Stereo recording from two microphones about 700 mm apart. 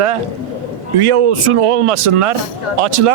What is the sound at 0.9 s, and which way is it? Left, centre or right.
Speech, right.